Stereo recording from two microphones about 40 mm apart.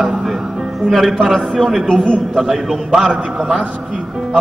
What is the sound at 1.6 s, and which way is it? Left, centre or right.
Speech, centre.